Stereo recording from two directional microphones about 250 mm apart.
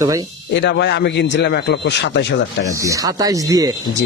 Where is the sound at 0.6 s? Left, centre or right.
Left.